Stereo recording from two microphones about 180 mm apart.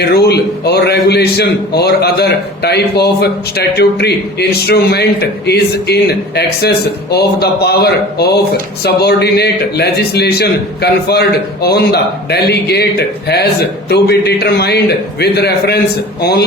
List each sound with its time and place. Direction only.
0.0 s a man's voice: 65° left (ahead or behind)